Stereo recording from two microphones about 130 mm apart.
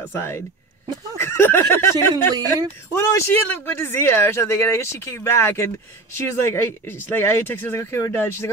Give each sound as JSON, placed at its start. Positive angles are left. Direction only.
{"t": 0.1, "sound": "speech", "side_deg": 20}